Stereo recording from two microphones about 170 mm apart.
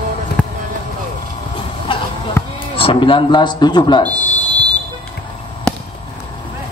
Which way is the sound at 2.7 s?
30° left (ahead or behind).